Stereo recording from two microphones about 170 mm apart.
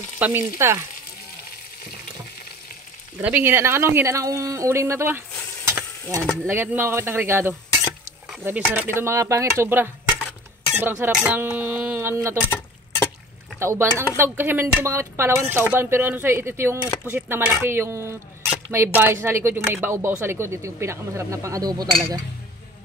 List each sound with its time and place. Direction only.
0.2 s speech: 15° right (ahead or behind)
3.2 s speech: 10° right (ahead or behind)
5.7 s stir: 15° right (ahead or behind)
6.4 s speech: 15° right (ahead or behind)
13.6 s speech: 15° right (ahead or behind)